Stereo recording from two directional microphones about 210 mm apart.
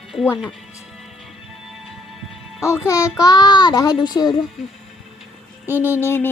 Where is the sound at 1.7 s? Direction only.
Centre (ahead or behind).